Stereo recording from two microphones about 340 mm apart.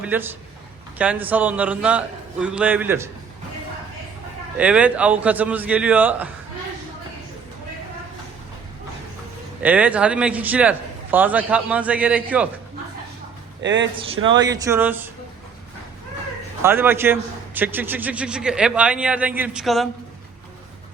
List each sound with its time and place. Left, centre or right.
0.0 s a man's voice: centre
4.5 s a man's voice: centre
9.6 s a man's voice: centre
13.6 s speech: right
14.3 s speech: centre
16.6 s a man's voice: centre